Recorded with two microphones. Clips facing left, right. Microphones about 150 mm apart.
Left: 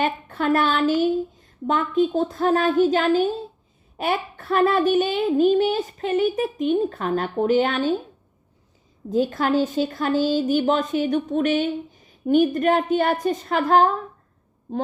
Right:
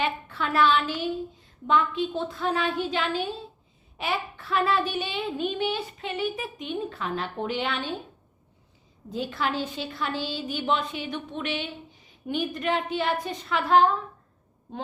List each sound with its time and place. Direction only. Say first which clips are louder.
0.0 s a woman's voice: left 6 dB; 45° left (ahead or behind)
9.0 s a woman's voice: left 8 dB; 45° left (ahead or behind)